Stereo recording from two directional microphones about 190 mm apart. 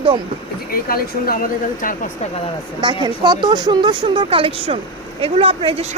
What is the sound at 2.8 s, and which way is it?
Speech, 25° right (ahead or behind).